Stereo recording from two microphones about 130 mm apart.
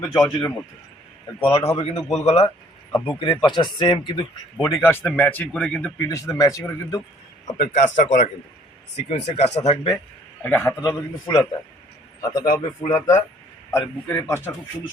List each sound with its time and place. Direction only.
0.0 s speech: 20° left (ahead or behind)
1.5 s speech: 50° left (ahead or behind)
3.2 s speech: 40° left (ahead or behind)
4.6 s speech: 20° left (ahead or behind)
6.1 s speech: 25° left (ahead or behind)
7.5 s speech: 75° left (ahead or behind)
9.0 s speech: 55° left (ahead or behind)
10.4 s speech: 15° left (ahead or behind)
10.8 s speech: 30° left (ahead or behind)